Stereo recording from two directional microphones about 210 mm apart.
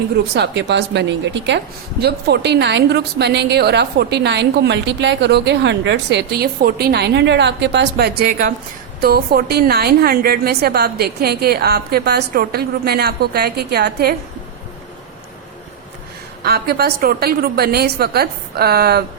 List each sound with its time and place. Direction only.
0.3 s speech: 55° right (ahead or behind)
16.4 s speech: 50° right (ahead or behind)